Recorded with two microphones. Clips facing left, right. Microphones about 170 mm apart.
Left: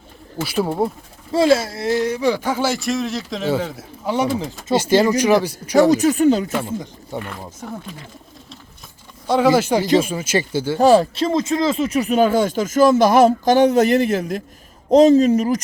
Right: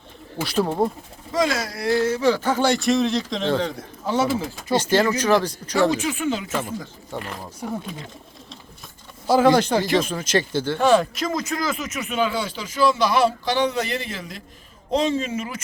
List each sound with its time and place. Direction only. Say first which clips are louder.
0.4 s speech: left 1 dB; 10° left (ahead or behind)
1.3 s speech: left 7 dB; 30° left (ahead or behind); by 5.7 s 10° left (ahead or behind)
5.9 s speech: left 9 dB; 40° left (ahead or behind)
7.1 s speech: left 3 dB; 10° left (ahead or behind)
9.2 s speech: left 1 dB; centre (ahead or behind)
10.8 s speech: left 5 dB; 35° left (ahead or behind)